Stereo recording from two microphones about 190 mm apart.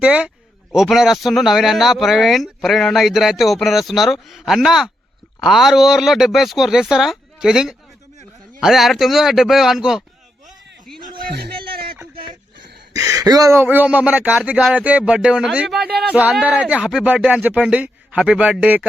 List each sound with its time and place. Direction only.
0.0 s a man's voice: 5° right (ahead or behind)
11.3 s a sound: 60° right (ahead or behind)
12.9 s speech: 15° right (ahead or behind)